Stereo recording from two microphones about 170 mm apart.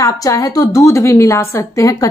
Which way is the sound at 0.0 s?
20° left (ahead or behind).